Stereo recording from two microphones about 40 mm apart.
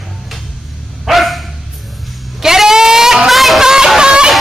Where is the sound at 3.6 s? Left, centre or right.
Centre.